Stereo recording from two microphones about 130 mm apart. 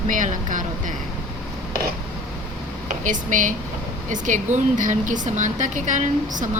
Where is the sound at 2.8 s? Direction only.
75° right (ahead or behind).